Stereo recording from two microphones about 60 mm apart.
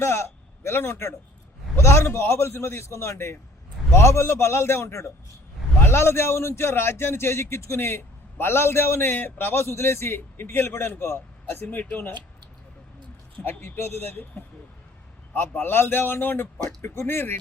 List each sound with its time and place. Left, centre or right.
0.0 s a man's voice: left
13.4 s a man's voice: left
15.3 s a man's voice: left
16.6 s a man's voice: left